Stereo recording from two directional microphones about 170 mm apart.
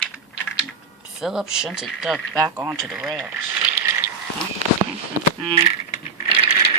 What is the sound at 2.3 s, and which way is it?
Speech, 20° right (ahead or behind).